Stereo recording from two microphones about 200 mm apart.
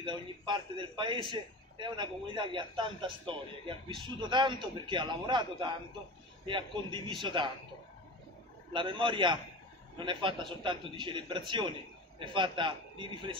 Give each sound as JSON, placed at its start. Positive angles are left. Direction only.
{"t": 0.0, "sound": "a man's voice", "side_deg": -25}
{"t": 8.7, "sound": "a man's voice", "side_deg": -25}